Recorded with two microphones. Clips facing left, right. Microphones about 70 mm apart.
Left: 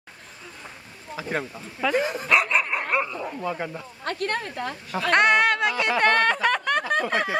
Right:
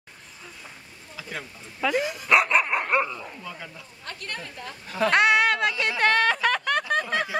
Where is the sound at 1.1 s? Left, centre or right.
Left.